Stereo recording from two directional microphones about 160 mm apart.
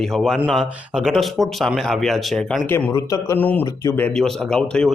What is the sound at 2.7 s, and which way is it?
Speech, 15° left (ahead or behind).